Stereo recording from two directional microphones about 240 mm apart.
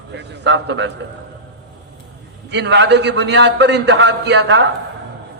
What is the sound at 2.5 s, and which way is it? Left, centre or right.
A man's voice, right.